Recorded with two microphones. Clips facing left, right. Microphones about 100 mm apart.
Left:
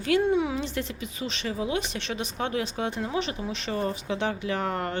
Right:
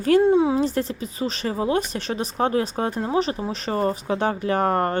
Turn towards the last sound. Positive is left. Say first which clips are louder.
# right 8 dB
turn(degrees=-45)  # may be behind; listen again after turning